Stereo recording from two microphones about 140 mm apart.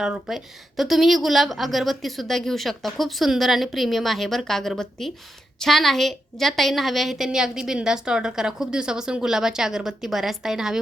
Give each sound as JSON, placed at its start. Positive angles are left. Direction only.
{"t": 0.0, "sound": "a woman's voice", "side_deg": -5}